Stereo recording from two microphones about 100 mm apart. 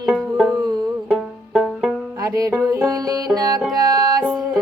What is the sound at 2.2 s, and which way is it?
Music, 35° right (ahead or behind).